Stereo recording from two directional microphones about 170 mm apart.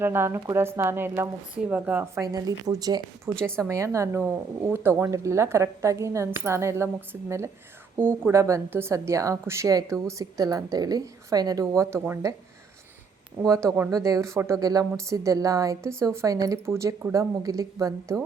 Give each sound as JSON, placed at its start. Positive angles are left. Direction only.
{"t": 0.0, "sound": "a woman's voice", "side_deg": -15}
{"t": 13.7, "sound": "a woman's voice", "side_deg": -15}